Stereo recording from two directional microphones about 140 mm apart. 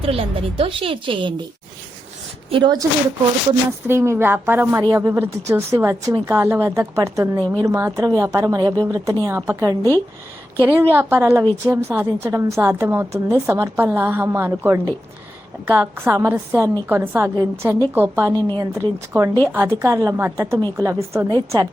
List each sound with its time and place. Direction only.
0.0 s a woman's voice: 45° right (ahead or behind)
2.5 s a woman's voice: 35° right (ahead or behind)
3.8 s a woman's voice: 20° right (ahead or behind)